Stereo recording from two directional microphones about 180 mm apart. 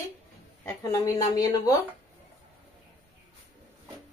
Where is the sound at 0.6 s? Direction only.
20° left (ahead or behind).